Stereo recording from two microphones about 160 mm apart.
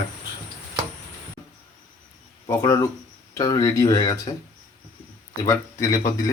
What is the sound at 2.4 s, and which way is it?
Speech, 20° left (ahead or behind).